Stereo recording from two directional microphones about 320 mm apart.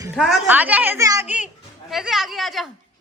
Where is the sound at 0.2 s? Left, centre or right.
Centre.